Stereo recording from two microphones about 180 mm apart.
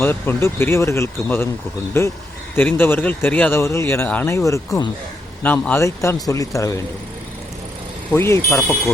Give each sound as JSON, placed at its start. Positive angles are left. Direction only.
{"t": 0.0, "sound": "speech", "side_deg": 10}
{"t": 8.1, "sound": "speech", "side_deg": 15}